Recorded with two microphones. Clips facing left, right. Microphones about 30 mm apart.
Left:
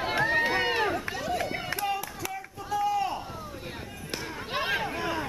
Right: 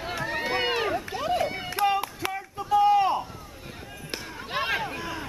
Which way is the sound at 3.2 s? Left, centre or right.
Centre.